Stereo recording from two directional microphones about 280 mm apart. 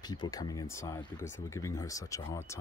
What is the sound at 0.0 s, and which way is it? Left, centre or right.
Speech, centre.